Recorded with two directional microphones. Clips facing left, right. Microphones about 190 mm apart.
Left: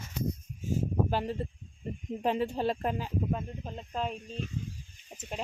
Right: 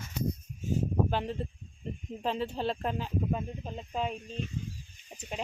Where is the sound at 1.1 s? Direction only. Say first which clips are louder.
Left 1 dB; 5° left (ahead or behind).